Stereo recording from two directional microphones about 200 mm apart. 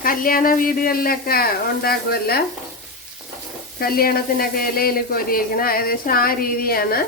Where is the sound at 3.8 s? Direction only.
50° left (ahead or behind).